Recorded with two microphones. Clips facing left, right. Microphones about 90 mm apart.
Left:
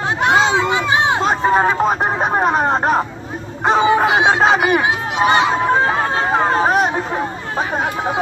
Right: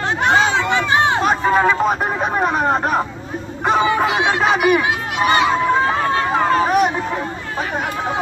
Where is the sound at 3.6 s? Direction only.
25° left (ahead or behind).